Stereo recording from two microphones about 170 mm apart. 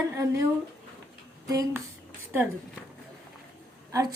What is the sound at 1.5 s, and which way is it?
Speech, 20° right (ahead or behind).